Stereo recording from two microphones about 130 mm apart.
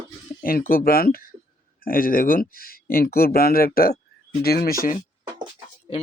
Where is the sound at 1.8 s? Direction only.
90° left.